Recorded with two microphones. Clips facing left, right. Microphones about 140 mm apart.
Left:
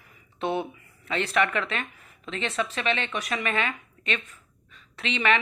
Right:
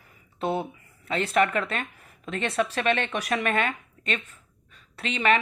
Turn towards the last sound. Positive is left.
turn(degrees=-40)  # may be behind; listen again after turning